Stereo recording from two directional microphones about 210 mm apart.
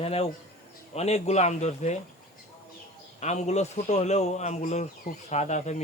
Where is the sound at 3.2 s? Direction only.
35° left (ahead or behind).